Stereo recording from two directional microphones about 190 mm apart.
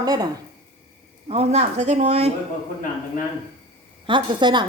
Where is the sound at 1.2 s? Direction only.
35° right (ahead or behind).